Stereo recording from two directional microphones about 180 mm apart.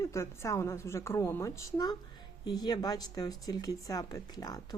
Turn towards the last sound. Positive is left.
turn(degrees=20)  # may be behind; listen again after turning